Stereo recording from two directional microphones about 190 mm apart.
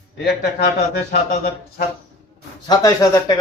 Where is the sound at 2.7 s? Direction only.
15° left (ahead or behind).